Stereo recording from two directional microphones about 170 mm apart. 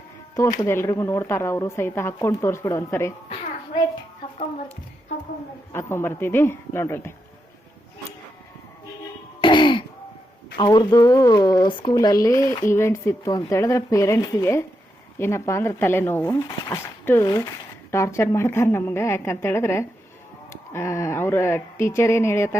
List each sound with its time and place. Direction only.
0.6 s speech: 15° left (ahead or behind)
5.7 s speech: 15° left (ahead or behind)
9.4 s throat clearing: 30° left (ahead or behind)
10.6 s speech: 25° left (ahead or behind)